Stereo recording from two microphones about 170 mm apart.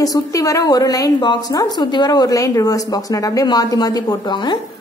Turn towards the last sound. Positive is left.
turn(degrees=25)  # may be behind; listen again after turning